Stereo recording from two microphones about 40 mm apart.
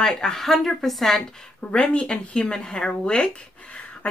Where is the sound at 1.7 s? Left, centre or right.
Left.